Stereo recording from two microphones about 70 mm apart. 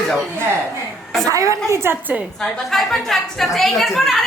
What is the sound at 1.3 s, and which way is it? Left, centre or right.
Speech, right.